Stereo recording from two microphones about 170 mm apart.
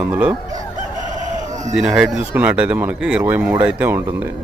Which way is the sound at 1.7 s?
5° right (ahead or behind).